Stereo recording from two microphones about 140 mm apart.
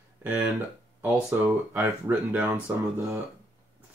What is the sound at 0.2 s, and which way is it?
Speech, 15° right (ahead or behind).